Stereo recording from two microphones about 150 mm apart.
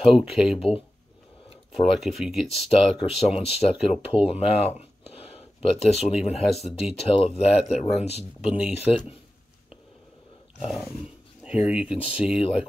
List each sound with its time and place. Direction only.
0.1 s speech: 5° right (ahead or behind)
0.6 s speech: 40° left (ahead or behind)
2.0 s speech: 5° right (ahead or behind)
2.7 s speech: 40° left (ahead or behind)
8.2 s speech: 5° right (ahead or behind)
11.4 s speech: 5° right (ahead or behind)